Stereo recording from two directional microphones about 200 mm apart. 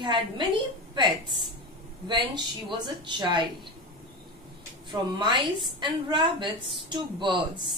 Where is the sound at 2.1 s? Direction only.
20° right (ahead or behind).